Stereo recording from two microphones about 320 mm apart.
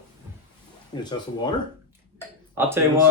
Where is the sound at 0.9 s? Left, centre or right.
Centre.